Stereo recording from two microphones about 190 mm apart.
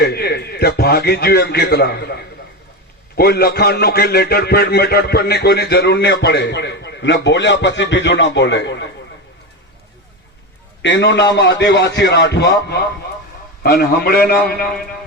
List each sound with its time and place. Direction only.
0.0 s a man's voice: 55° left (ahead or behind)
3.2 s a man's voice: 55° left (ahead or behind)
10.8 s a man's voice: 65° left (ahead or behind)